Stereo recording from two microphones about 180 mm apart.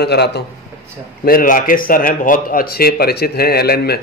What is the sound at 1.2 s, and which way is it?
A man's voice, 55° left (ahead or behind).